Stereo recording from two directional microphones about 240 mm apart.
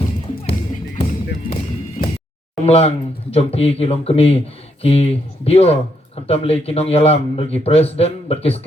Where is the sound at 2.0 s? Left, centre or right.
Left.